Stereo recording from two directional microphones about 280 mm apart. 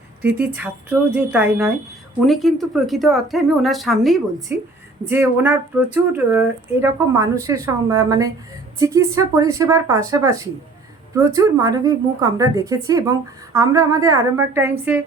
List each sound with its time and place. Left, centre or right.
0.2 s speech: centre